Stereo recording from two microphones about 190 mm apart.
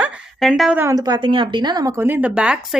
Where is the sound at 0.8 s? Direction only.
20° right (ahead or behind).